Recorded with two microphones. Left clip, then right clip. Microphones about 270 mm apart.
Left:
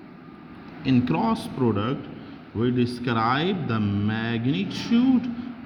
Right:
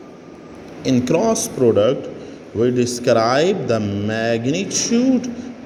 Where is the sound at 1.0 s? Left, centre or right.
Centre.